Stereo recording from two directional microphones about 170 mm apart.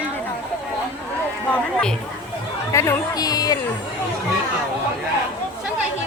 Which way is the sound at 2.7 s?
15° left (ahead or behind).